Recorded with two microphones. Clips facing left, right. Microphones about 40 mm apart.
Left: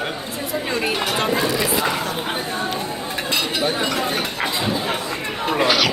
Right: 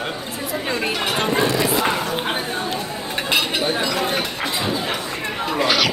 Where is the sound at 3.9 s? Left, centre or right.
Right.